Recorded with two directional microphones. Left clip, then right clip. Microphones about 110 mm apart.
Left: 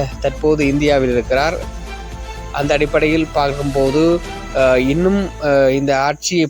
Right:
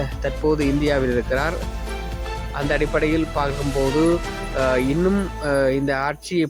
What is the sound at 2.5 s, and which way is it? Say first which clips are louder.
Speech: left 6 dB; 40° left (ahead or behind).